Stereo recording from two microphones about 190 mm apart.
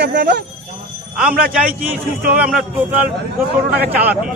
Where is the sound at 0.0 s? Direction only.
65° right (ahead or behind).